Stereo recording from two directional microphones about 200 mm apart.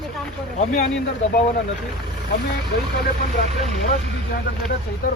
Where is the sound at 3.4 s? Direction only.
50° left (ahead or behind).